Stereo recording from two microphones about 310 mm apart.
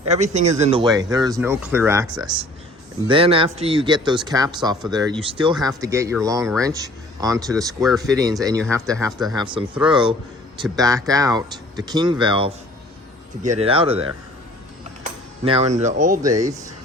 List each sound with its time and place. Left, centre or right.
0.1 s speech: right